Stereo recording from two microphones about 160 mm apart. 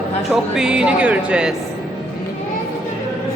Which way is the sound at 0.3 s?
5° right (ahead or behind).